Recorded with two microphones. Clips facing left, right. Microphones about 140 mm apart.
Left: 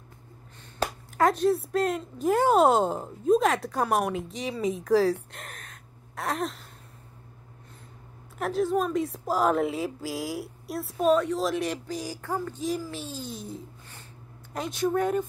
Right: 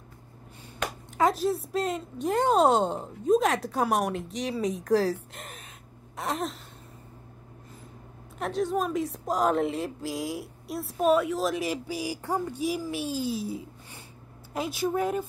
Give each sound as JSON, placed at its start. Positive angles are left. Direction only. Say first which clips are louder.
{"t": 0.8, "sound": "a sound", "louder": "left 3 dB", "side_deg": 35}
{"t": 1.1, "sound": "a woman's voice", "louder": "left 2 dB", "side_deg": 0}
{"t": 8.4, "sound": "a woman's voice", "louder": "left 2 dB", "side_deg": 0}